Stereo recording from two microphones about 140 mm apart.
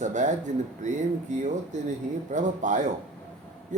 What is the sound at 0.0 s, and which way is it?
Speech, 60° right (ahead or behind).